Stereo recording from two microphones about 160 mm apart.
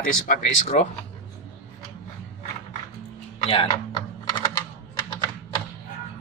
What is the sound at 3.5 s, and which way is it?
Speech, 35° left (ahead or behind).